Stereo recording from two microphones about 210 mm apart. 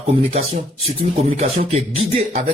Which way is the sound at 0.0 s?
30° right (ahead or behind).